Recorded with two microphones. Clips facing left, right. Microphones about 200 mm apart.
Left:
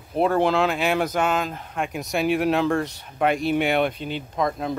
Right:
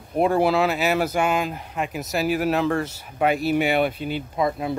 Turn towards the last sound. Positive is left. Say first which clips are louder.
# right 1 dB
turn(degrees=-5)  # may be behind; listen again after turning